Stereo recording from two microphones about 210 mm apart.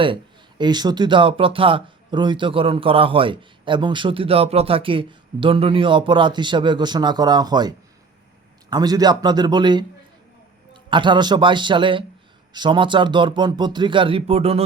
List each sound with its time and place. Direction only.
0.6 s speech: 20° right (ahead or behind)
8.7 s speech: 20° right (ahead or behind)
10.8 s speech: 20° right (ahead or behind)